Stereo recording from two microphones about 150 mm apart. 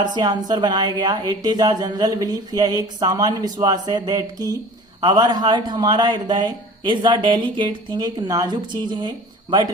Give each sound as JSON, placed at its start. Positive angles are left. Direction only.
{"t": 0.0, "sound": "speech", "side_deg": -30}